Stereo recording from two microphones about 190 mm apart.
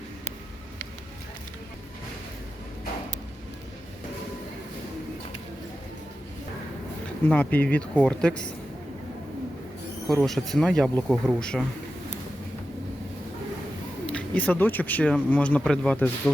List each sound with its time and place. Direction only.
7.3 s speech: 10° left (ahead or behind)
10.1 s speech: centre (ahead or behind)
14.1 s speech: 5° left (ahead or behind)